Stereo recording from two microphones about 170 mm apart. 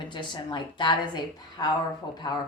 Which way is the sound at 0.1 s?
25° left (ahead or behind).